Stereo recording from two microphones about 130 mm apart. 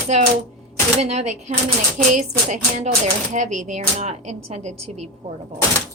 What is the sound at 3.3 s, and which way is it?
Speech, 70° right (ahead or behind).